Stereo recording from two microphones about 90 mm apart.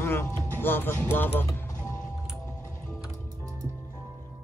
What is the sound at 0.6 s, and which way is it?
Speech, 25° left (ahead or behind).